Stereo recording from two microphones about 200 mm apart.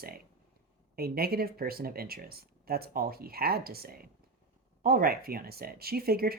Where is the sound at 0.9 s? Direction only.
50° right (ahead or behind).